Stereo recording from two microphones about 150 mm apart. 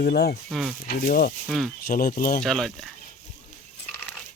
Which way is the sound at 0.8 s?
65° left (ahead or behind).